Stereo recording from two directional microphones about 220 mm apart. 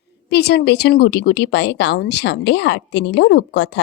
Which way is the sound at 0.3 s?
45° left (ahead or behind).